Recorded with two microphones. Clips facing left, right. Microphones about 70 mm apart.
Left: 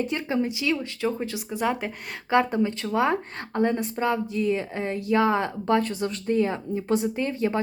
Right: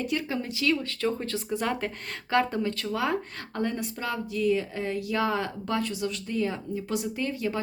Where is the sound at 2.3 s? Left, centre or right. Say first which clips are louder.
Left 4 dB; left.